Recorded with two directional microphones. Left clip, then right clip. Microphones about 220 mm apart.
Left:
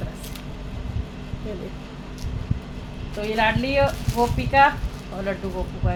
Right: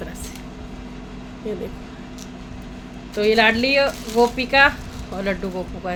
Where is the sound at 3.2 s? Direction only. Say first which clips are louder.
Right 6 dB; 45° right (ahead or behind).